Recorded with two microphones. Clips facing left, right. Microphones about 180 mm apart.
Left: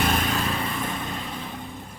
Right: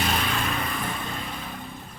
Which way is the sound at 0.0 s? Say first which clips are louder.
Left 3 dB; 45° left (ahead or behind).